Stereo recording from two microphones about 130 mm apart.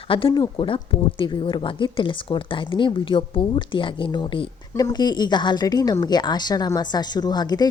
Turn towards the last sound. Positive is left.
turn(degrees=30)  # may be behind; listen again after turning